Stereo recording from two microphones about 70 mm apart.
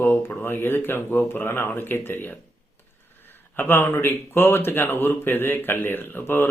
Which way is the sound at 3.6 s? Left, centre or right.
Left.